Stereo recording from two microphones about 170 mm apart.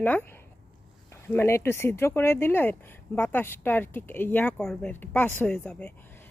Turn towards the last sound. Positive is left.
turn(degrees=10)  # may be behind; listen again after turning